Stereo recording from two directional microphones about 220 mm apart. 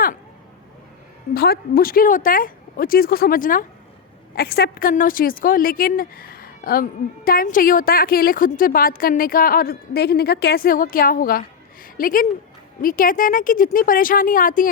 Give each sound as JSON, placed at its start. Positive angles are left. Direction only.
{"t": 1.3, "sound": "a woman's voice", "side_deg": 45}